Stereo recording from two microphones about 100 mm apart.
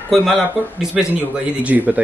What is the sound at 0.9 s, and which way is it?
Speech, 15° right (ahead or behind).